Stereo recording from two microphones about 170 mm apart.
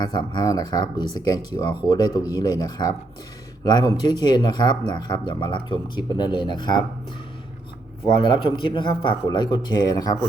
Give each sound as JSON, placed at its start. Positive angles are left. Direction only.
{"t": 0.0, "sound": "speech", "side_deg": 25}
{"t": 8.1, "sound": "speech", "side_deg": 25}